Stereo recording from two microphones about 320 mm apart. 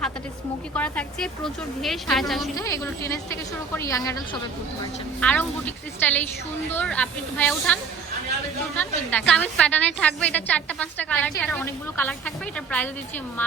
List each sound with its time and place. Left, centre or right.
0.8 s a woman's voice: centre
5.2 s a woman's voice: centre